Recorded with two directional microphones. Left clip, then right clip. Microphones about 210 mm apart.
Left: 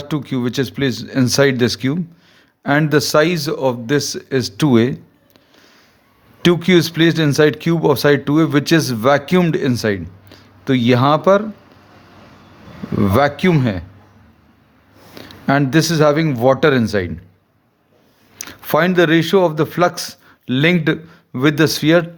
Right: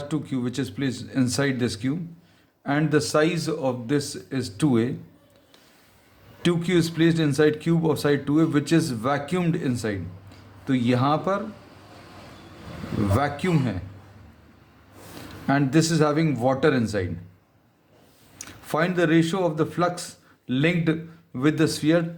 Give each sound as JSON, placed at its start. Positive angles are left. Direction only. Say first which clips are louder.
{"t": 0.0, "sound": "speech", "louder": "left 7 dB", "side_deg": 40}
{"t": 6.4, "sound": "speech", "louder": "left 9 dB", "side_deg": 40}
{"t": 13.1, "sound": "speech", "louder": "left 11 dB", "side_deg": 45}
{"t": 15.4, "sound": "a man's voice", "louder": "left 7 dB", "side_deg": 40}
{"t": 18.3, "sound": "a man's voice", "louder": "left 9 dB", "side_deg": 40}